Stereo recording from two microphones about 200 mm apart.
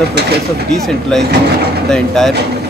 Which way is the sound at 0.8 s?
Centre (ahead or behind).